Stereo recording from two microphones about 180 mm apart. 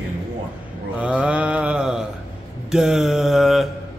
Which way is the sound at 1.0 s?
5° right (ahead or behind).